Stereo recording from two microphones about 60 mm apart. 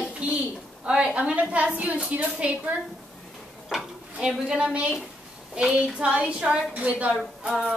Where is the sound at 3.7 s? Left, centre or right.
Centre.